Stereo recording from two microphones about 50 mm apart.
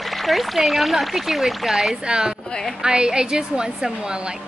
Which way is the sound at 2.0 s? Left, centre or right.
Centre.